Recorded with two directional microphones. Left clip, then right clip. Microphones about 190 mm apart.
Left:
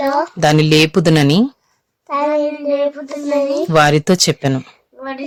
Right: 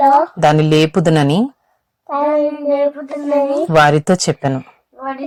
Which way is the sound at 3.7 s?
20° left (ahead or behind).